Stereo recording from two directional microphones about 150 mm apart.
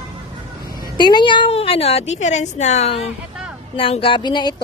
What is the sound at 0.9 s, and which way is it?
A woman's voice, 30° left (ahead or behind).